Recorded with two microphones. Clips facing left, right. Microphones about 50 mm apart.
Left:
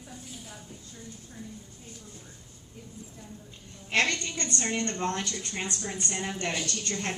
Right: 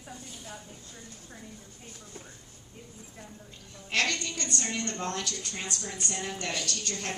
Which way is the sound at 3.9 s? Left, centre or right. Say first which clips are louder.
Left 2 dB; left.